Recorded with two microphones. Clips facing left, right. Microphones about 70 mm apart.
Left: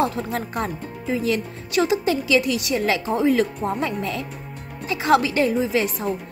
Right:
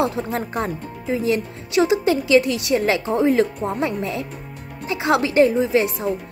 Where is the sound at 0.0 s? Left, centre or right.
Right.